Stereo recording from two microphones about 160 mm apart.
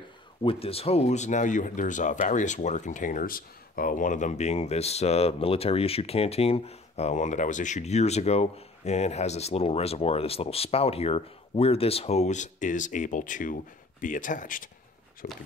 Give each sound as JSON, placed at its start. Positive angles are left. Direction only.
{"t": 0.4, "sound": "speech", "side_deg": 35}